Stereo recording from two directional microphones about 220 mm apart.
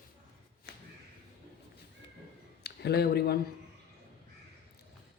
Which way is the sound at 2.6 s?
45° left (ahead or behind).